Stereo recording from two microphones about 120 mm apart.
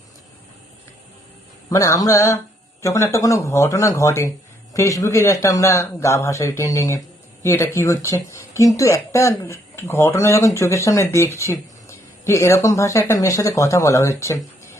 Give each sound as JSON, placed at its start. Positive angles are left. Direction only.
{"t": 1.7, "sound": "speech", "side_deg": 25}